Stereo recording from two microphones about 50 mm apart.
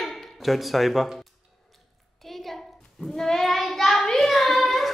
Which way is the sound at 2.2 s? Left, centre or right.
Centre.